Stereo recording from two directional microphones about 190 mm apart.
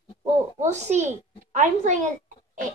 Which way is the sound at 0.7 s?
35° right (ahead or behind).